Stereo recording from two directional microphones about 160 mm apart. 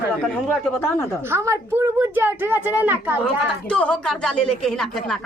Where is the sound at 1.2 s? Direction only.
15° right (ahead or behind).